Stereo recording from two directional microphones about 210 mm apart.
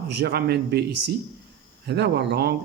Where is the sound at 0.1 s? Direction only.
50° right (ahead or behind).